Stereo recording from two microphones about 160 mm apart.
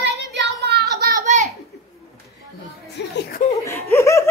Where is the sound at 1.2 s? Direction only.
50° right (ahead or behind).